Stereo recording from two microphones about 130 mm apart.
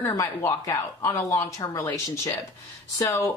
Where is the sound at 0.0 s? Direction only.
25° left (ahead or behind).